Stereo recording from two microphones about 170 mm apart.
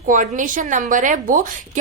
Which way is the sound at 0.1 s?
50° right (ahead or behind).